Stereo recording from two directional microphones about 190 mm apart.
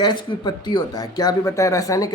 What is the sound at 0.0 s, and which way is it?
Speech, 25° left (ahead or behind).